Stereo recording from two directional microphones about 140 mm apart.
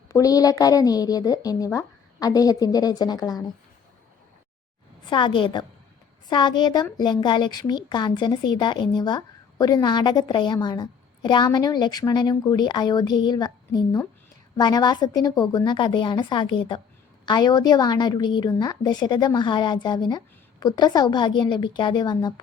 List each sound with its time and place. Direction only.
0.1 s a woman's voice: 25° left (ahead or behind)
5.0 s a woman's voice: 35° left (ahead or behind)